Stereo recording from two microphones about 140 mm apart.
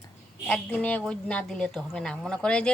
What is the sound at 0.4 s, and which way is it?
A woman's voice, 10° left (ahead or behind).